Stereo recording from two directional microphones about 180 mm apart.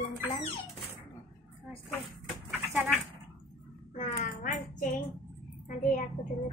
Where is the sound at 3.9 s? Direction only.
45° left (ahead or behind).